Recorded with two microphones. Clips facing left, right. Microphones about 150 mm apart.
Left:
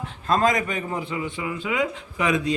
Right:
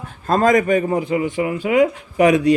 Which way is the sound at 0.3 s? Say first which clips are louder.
Right 7 dB; 50° right (ahead or behind).